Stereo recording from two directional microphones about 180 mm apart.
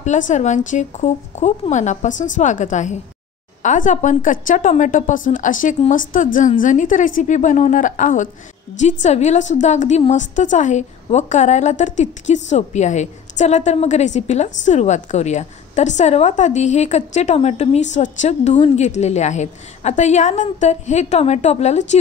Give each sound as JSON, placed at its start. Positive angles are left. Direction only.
{"t": 0.0, "sound": "a woman's voice", "side_deg": 40}